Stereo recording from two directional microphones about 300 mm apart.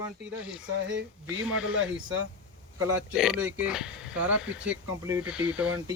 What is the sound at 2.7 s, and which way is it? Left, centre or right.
Speech, centre.